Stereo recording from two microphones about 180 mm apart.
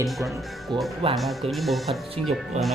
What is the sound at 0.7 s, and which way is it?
Speech, 25° right (ahead or behind).